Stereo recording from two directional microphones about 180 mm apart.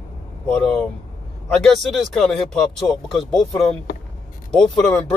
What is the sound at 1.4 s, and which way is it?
Speech, 5° left (ahead or behind).